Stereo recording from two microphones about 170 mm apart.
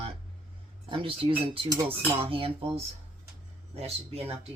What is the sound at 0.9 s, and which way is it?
Speech, 30° right (ahead or behind).